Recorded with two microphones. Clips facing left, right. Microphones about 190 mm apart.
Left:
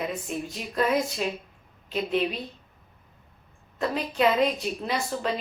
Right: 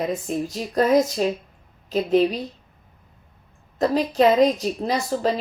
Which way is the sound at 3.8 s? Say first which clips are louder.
Right 6 dB; 40° right (ahead or behind).